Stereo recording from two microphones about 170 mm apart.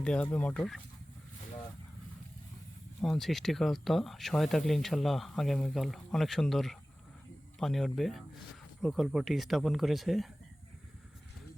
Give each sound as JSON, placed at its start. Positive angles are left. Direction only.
{"t": 0.0, "sound": "speech", "side_deg": 5}
{"t": 3.0, "sound": "speech", "side_deg": 0}